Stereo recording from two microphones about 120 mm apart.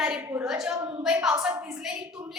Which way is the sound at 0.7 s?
35° right (ahead or behind).